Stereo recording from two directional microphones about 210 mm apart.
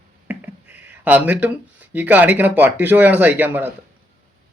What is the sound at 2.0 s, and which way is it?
A man's voice, 10° right (ahead or behind).